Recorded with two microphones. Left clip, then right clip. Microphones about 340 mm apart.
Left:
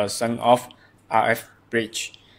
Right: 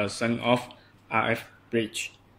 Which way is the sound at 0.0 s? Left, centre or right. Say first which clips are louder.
Left 5 dB; left.